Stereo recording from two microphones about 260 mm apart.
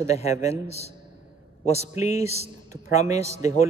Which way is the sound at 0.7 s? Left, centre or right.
Left.